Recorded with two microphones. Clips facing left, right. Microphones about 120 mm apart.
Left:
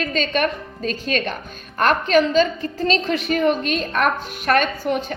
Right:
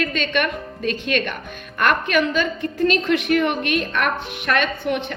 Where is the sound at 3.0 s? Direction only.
65° right (ahead or behind).